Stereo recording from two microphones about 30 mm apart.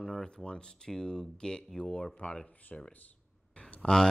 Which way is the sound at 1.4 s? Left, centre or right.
Left.